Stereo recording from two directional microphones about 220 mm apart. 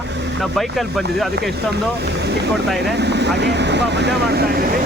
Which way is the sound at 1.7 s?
50° right (ahead or behind).